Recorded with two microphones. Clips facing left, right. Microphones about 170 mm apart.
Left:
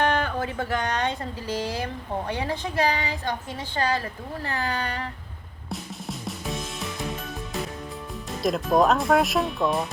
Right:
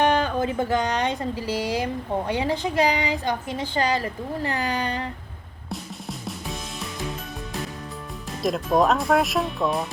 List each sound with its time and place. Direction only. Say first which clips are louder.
0.0 s speech: right 3 dB; 15° right (ahead or behind)
5.6 s music: even; centre (ahead or behind)
8.4 s speech: even; centre (ahead or behind)